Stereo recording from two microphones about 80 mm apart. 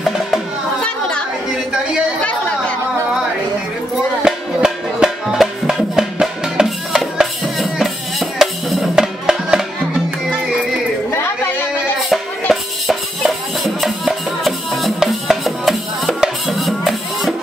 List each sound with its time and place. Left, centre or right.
0.8 s chatter: centre
4.2 s music: centre
12.0 s music: centre